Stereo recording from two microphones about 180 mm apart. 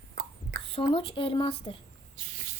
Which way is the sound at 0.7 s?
30° left (ahead or behind).